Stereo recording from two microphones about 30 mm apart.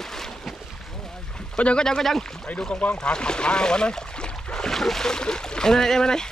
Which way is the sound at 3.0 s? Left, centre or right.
Left.